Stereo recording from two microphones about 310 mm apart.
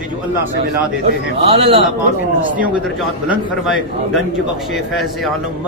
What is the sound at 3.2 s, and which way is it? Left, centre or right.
Speech, centre.